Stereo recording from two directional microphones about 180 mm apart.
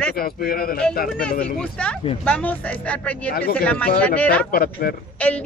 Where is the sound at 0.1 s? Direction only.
55° left (ahead or behind).